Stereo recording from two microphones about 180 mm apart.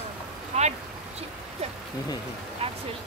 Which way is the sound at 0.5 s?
40° right (ahead or behind).